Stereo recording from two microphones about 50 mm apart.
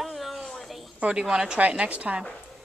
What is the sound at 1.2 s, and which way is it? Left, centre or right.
A woman's voice, centre.